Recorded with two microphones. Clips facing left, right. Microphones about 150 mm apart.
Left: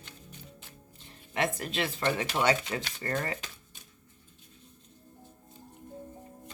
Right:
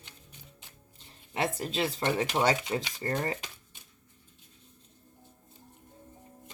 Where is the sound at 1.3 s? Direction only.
30° right (ahead or behind).